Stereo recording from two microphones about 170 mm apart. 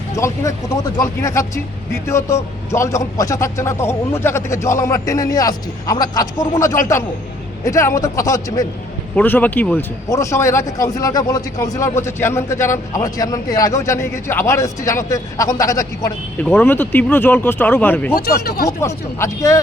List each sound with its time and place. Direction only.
0.1 s a man's voice: 20° left (ahead or behind)
18.1 s speech: 65° left (ahead or behind)
18.8 s a man's voice: 15° left (ahead or behind)